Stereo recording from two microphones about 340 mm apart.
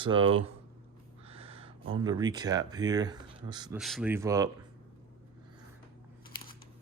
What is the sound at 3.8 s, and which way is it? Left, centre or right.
Speech, centre.